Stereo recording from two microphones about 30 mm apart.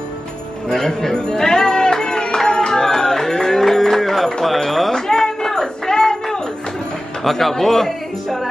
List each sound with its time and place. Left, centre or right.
0.7 s music: centre
4.6 s speech: centre
4.9 s a sound: centre
7.2 s speech: centre